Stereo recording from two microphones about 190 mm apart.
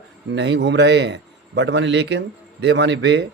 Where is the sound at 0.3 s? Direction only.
70° right (ahead or behind).